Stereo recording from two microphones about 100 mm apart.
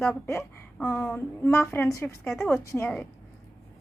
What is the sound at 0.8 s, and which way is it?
A woman's voice, 25° left (ahead or behind).